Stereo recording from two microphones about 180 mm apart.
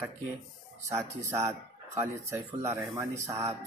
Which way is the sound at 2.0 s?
15° right (ahead or behind).